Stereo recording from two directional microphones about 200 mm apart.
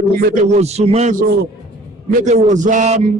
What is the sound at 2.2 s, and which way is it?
Music, 35° right (ahead or behind).